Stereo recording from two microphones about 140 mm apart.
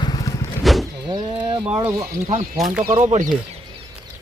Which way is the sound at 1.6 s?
10° right (ahead or behind).